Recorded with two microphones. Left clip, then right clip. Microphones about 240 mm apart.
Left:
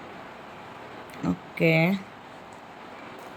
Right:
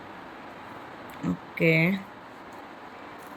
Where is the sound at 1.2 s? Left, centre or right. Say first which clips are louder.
Even; centre.